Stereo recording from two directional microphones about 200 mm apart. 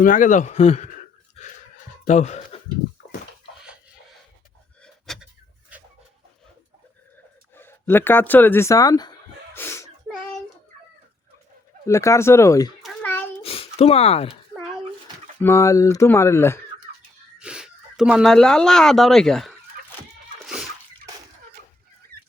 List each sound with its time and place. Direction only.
0.0 s speech: 40° left (ahead or behind)
2.0 s speech: 35° left (ahead or behind)
4.8 s a sound: centre (ahead or behind)
7.5 s speech: 10° left (ahead or behind)
9.6 s sneeze: 10° left (ahead or behind)
11.9 s speech: 15° left (ahead or behind)
12.8 s a sound: 10° left (ahead or behind)
13.4 s a sound: 30° left (ahead or behind)
15.4 s speech: 15° left (ahead or behind)
17.4 s speech: 5° right (ahead or behind)